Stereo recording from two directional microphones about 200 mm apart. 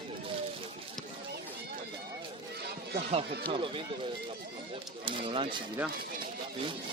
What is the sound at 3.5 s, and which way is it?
Speech, 25° right (ahead or behind).